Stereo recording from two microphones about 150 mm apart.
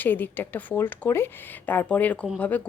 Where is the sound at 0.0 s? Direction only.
10° left (ahead or behind).